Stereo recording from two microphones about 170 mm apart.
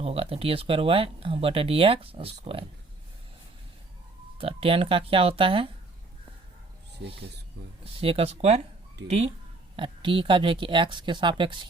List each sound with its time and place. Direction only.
0.0 s speech: 35° right (ahead or behind)
4.4 s speech: 35° right (ahead or behind)
7.9 s speech: 35° right (ahead or behind)